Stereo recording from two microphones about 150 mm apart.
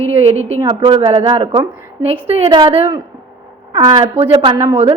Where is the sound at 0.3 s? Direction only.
45° right (ahead or behind).